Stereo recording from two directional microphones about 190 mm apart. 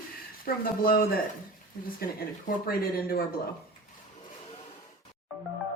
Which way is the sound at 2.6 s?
55° left (ahead or behind).